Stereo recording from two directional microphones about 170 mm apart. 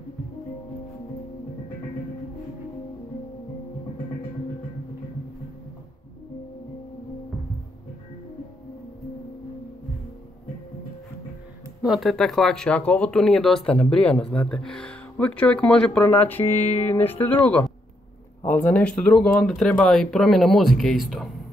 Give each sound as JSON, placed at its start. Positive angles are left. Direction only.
{"t": 11.8, "sound": "speech", "side_deg": 0}
{"t": 16.6, "sound": "music", "side_deg": 40}
{"t": 16.9, "sound": "speech", "side_deg": 10}